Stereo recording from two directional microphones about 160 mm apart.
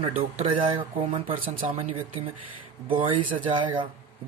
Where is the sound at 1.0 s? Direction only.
50° right (ahead or behind).